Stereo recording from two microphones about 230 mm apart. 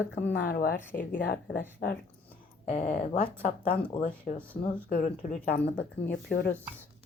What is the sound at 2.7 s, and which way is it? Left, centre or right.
Speech, left.